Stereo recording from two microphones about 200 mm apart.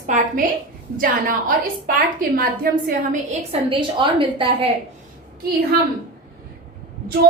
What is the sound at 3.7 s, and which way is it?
A woman's voice, 25° right (ahead or behind).